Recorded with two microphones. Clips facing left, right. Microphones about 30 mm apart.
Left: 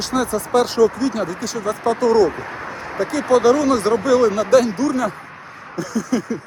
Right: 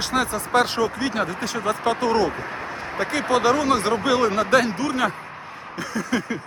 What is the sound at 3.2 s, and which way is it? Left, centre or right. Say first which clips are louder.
Speech: left 5 dB; right.